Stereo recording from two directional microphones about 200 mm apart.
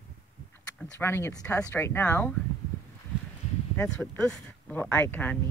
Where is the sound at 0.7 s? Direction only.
10° left (ahead or behind).